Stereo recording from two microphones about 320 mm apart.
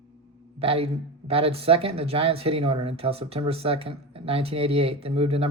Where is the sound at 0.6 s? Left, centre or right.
Centre.